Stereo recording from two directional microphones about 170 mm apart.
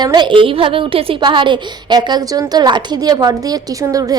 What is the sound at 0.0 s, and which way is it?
A woman's voice, 25° right (ahead or behind).